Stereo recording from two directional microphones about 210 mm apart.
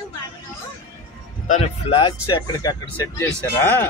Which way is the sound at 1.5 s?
30° left (ahead or behind).